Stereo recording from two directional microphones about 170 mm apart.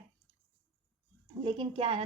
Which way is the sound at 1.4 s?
30° right (ahead or behind).